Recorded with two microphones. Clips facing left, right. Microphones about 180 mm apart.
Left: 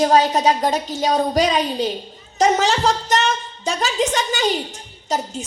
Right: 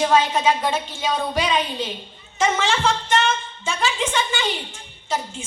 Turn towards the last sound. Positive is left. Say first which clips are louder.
# left 3 dB
turn(degrees=40)  # may be behind; listen again after turning